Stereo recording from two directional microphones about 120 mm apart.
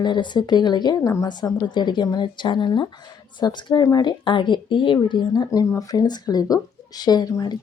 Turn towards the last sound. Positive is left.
turn(degrees=35)  # may be behind; listen again after turning